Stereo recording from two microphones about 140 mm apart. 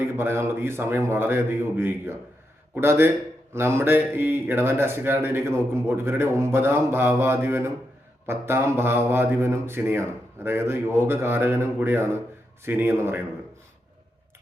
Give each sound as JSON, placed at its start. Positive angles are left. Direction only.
{"t": 0.0, "sound": "speech", "side_deg": -15}